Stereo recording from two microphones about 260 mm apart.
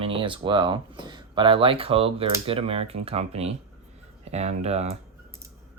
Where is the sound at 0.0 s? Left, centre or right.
Centre.